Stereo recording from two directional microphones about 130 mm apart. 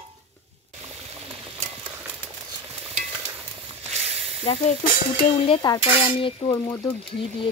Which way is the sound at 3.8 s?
55° right (ahead or behind).